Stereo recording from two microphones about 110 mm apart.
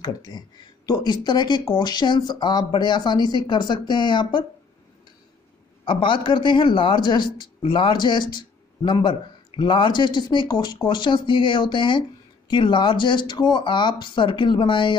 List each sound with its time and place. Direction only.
0.0 s speech: 40° left (ahead or behind)
5.9 s a man's voice: 50° left (ahead or behind)